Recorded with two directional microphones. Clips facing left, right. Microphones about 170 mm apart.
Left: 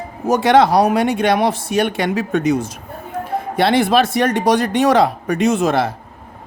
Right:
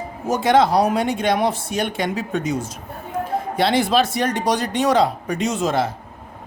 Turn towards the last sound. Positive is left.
turn(degrees=65)  # may be behind; listen again after turning